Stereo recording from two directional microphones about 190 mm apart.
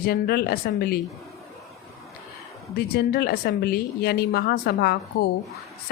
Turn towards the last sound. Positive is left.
turn(degrees=60)  # may be behind; listen again after turning